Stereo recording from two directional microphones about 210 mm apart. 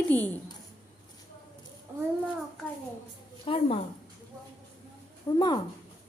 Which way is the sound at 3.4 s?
25° left (ahead or behind).